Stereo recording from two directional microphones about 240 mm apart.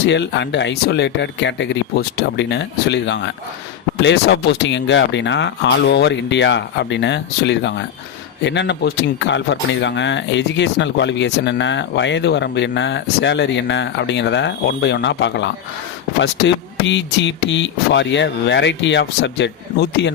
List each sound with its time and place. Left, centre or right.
0.0 s speech: left